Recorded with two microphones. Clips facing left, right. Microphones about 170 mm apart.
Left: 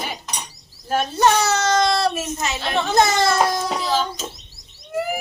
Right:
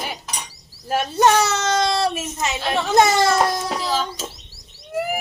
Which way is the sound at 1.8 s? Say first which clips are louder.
Left 1 dB; 20° right (ahead or behind).